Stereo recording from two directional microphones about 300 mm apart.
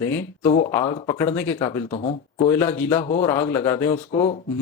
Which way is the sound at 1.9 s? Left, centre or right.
Centre.